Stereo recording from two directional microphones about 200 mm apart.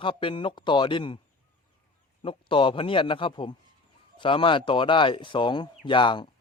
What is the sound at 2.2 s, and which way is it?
A man's voice, 25° left (ahead or behind).